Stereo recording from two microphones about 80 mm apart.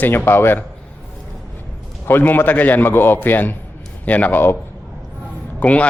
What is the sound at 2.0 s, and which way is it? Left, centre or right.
Speech, left.